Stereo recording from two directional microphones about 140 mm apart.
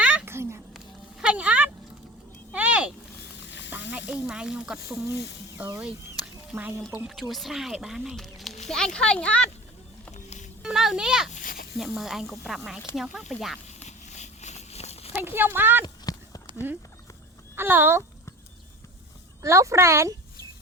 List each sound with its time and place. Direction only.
0.0 s a sound: 10° right (ahead or behind)
3.7 s speech: 10° right (ahead or behind)
5.8 s speech: 5° right (ahead or behind)
7.1 s speech: centre (ahead or behind)
10.2 s a sound: 60° left (ahead or behind)
10.6 s a child's voice: 5° right (ahead or behind)
13.7 s a sound: 55° left (ahead or behind)
15.1 s speech: 15° right (ahead or behind)
15.8 s clip-clop: 25° left (ahead or behind)
17.5 s speech: 15° right (ahead or behind)
19.4 s speech: 20° right (ahead or behind)